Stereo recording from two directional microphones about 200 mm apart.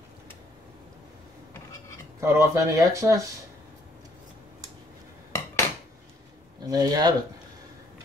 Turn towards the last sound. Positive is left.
turn(degrees=-20)  # may be behind; listen again after turning